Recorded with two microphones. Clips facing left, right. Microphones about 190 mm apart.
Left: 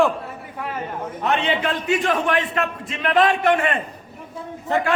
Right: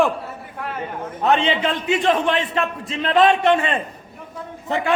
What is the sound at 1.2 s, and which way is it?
A man's voice, 25° right (ahead or behind).